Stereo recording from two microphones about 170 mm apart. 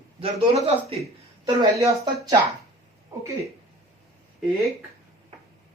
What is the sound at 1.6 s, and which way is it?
Speech, 20° right (ahead or behind).